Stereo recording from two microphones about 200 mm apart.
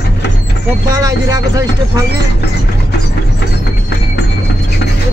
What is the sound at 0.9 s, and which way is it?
Speech, 15° right (ahead or behind).